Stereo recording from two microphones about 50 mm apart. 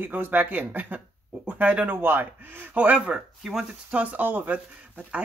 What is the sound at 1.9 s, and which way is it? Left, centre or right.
Speech, right.